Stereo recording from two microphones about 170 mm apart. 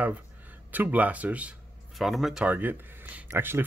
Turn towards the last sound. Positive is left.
turn(degrees=-15)  # may be behind; listen again after turning